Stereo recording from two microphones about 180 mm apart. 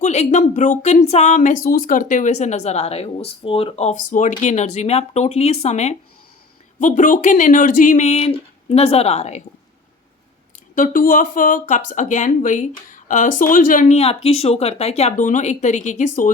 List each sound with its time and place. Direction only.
0.0 s speech: 40° left (ahead or behind)
10.8 s speech: 50° left (ahead or behind)